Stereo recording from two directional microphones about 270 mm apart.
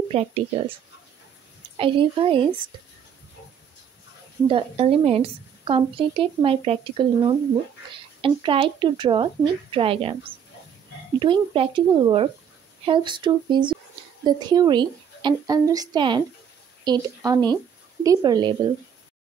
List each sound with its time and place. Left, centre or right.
0.1 s a woman's voice: right
1.8 s a woman's voice: centre
4.5 s a woman's voice: right
11.1 s a woman's voice: centre